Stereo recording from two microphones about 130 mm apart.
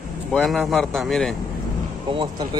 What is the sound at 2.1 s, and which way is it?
Speech, 40° right (ahead or behind).